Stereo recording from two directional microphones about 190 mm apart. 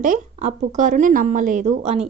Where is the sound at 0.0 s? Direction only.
40° right (ahead or behind).